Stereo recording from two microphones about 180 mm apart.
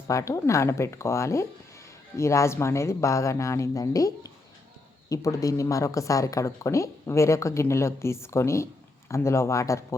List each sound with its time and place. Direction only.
0.1 s speech: 15° left (ahead or behind)